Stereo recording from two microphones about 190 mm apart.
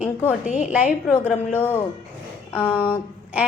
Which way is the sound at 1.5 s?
10° left (ahead or behind).